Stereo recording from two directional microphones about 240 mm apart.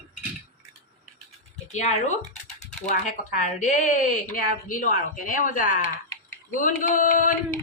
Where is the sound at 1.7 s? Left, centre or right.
Left.